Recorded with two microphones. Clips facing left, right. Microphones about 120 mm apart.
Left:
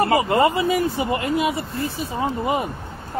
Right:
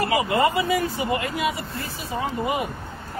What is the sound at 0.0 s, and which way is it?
Speech, 30° left (ahead or behind).